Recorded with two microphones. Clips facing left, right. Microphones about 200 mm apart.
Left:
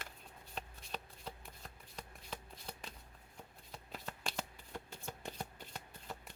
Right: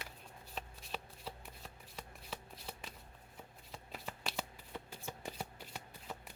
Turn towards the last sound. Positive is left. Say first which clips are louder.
# right 1 dB
turn(degrees=-5)  # may be behind; listen again after turning